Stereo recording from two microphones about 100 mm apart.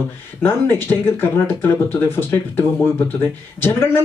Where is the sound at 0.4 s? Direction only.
25° left (ahead or behind).